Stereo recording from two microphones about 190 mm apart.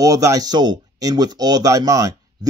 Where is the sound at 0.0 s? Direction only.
15° right (ahead or behind).